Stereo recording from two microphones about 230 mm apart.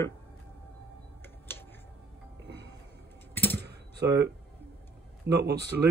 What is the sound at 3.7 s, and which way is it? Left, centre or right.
Computer keyboard, right.